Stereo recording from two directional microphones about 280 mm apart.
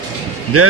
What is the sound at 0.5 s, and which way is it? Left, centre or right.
Speech, right.